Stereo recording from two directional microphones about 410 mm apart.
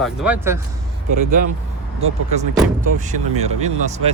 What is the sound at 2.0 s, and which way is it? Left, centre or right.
Speech, centre.